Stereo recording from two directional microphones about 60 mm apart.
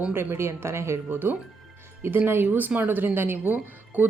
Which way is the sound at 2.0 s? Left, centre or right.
Right.